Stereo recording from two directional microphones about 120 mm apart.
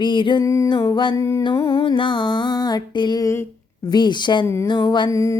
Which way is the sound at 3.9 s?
40° left (ahead or behind).